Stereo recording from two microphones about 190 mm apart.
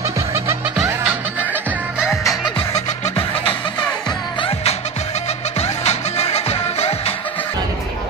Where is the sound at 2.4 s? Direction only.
30° left (ahead or behind).